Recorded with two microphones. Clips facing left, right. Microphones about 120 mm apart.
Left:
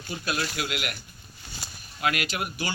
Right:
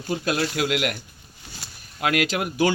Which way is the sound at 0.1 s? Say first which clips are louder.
Right 6 dB; 75° right (ahead or behind).